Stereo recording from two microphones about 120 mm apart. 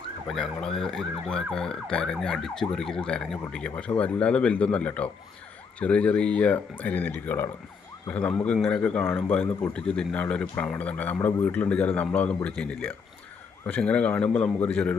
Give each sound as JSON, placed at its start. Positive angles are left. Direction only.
{"t": 0.3, "sound": "speech", "side_deg": 5}
{"t": 9.7, "sound": "speech", "side_deg": 10}